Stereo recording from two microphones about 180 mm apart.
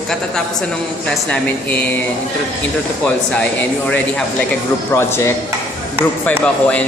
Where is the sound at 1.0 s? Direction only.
5° left (ahead or behind).